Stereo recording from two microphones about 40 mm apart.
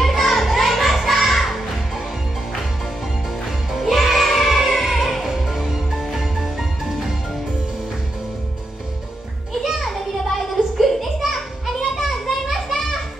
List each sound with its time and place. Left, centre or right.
0.0 s music: centre
3.4 s music: centre
9.5 s children playing: centre